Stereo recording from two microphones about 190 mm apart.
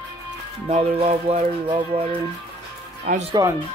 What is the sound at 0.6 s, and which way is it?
Speech, 35° right (ahead or behind).